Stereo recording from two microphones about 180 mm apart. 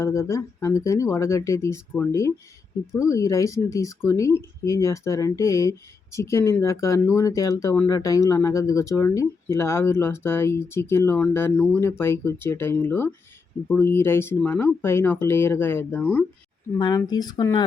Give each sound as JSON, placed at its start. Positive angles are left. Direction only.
{"t": 0.0, "sound": "speech", "side_deg": 15}
{"t": 16.7, "sound": "speech", "side_deg": 25}